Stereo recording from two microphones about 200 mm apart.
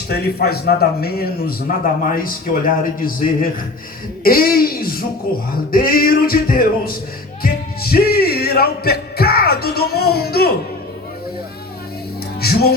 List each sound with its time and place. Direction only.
0.1 s a man's voice: 55° left (ahead or behind)
12.4 s music: 50° left (ahead or behind)